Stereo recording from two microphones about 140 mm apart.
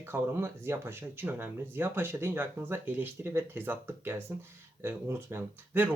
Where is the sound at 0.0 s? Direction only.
15° right (ahead or behind).